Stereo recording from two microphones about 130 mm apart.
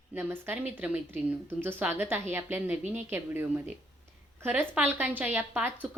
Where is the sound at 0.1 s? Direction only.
15° right (ahead or behind).